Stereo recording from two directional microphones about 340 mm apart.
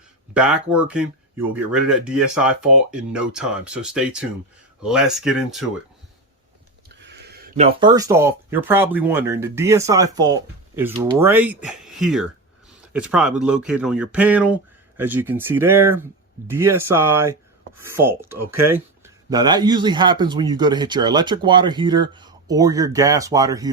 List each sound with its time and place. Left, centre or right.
0.3 s speech: centre
6.8 s speech: right; by 23.7 s centre